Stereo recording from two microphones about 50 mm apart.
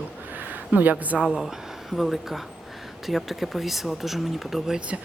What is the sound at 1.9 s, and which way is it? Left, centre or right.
Speech, centre.